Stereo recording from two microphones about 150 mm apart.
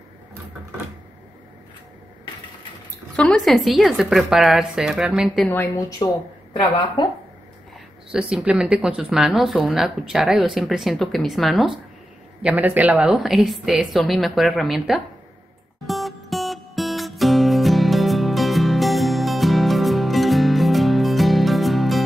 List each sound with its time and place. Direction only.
3.2 s speech: 5° left (ahead or behind)
5.5 s a woman's voice: 20° left (ahead or behind)
8.1 s speech: 5° right (ahead or behind)
15.9 s music: centre (ahead or behind)